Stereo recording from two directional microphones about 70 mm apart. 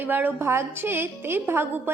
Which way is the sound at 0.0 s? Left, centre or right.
Right.